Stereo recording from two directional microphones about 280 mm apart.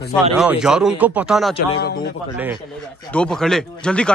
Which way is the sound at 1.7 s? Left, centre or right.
Left.